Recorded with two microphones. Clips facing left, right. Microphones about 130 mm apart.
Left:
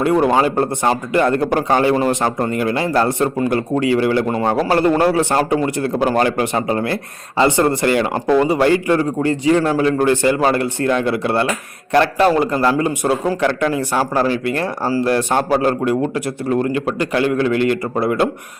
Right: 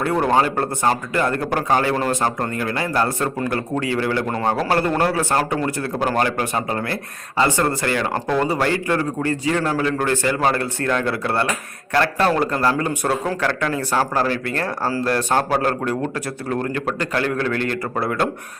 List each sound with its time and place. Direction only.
0.0 s a man's voice: 15° left (ahead or behind)